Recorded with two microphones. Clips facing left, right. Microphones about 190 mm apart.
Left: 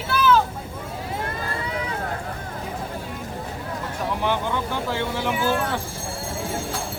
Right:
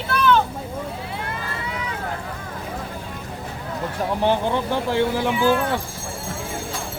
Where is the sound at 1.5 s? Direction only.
40° left (ahead or behind).